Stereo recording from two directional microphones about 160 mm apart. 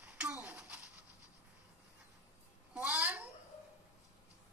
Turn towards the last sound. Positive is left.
turn(degrees=-10)  # may be behind; listen again after turning